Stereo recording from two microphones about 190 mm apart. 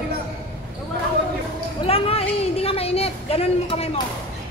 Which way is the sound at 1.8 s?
30° left (ahead or behind).